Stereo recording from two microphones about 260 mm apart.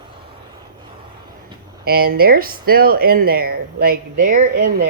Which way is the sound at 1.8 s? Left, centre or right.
Right.